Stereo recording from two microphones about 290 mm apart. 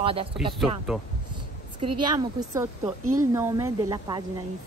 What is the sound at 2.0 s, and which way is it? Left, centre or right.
Speech, centre.